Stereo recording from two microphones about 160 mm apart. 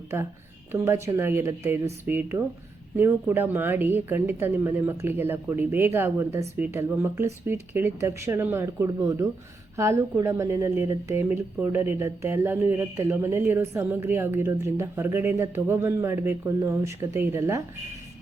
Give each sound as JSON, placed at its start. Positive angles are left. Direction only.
{"t": 0.7, "sound": "speech", "side_deg": -15}